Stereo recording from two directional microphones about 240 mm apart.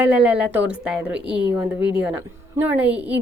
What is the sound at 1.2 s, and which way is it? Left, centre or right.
Speech, right.